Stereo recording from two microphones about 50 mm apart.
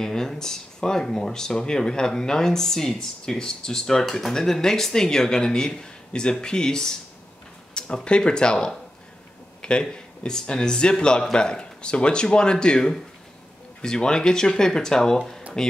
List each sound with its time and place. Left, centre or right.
0.0 s speech: centre